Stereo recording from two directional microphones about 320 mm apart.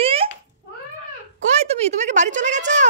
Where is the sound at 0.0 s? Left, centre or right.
Centre.